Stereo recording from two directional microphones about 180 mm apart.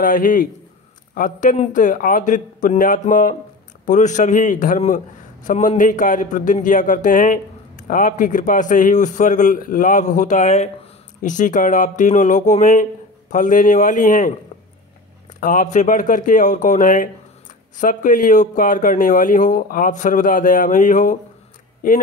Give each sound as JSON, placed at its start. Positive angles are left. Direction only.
{"t": 0.0, "sound": "a man's voice", "side_deg": 50}
{"t": 15.4, "sound": "a man's voice", "side_deg": 45}